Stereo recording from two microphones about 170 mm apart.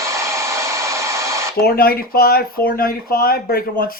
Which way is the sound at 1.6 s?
65° left (ahead or behind).